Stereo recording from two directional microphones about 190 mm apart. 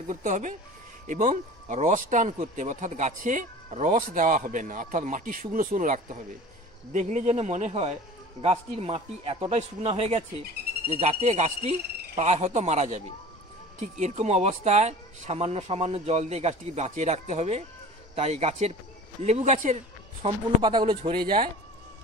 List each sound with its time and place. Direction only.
0.1 s speech: 40° right (ahead or behind)
20.2 s speech: 25° right (ahead or behind)